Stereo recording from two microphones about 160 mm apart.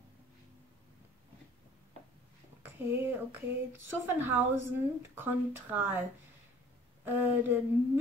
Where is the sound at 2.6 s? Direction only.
15° right (ahead or behind).